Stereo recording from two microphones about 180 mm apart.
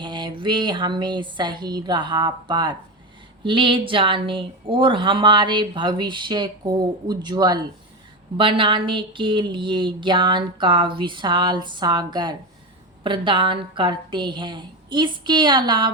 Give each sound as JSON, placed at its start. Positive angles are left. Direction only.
{"t": 0.0, "sound": "speech", "side_deg": -25}